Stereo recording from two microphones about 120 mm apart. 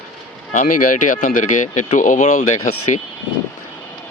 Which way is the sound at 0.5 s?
90° left.